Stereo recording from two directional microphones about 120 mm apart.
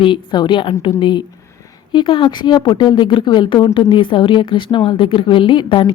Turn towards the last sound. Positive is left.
turn(degrees=45)  # may be behind; listen again after turning